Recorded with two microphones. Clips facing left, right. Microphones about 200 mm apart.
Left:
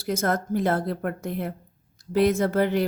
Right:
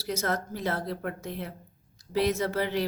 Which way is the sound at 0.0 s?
50° left (ahead or behind).